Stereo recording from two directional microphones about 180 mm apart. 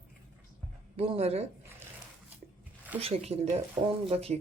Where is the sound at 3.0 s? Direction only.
35° right (ahead or behind).